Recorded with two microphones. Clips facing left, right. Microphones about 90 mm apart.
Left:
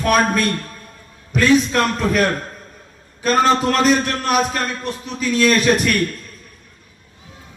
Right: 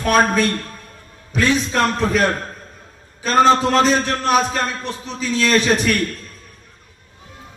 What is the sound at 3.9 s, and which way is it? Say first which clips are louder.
Speech: even; 35° right (ahead or behind).